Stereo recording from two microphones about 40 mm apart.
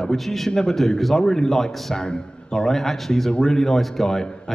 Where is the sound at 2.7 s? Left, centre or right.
Centre.